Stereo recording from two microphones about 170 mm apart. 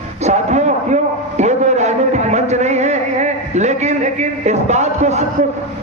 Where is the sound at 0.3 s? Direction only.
40° right (ahead or behind).